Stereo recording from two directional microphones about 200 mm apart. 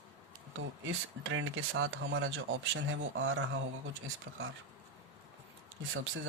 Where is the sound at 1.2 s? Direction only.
70° right (ahead or behind).